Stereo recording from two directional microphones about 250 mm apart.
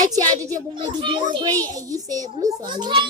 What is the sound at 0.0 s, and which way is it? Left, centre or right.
A child's voice, centre.